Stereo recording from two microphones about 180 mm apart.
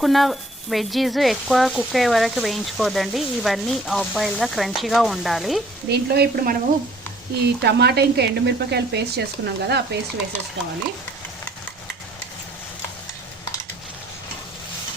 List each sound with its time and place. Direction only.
0.0 s speech: centre (ahead or behind)
5.9 s sizzle: 60° right (ahead or behind)
7.6 s speech: 65° right (ahead or behind)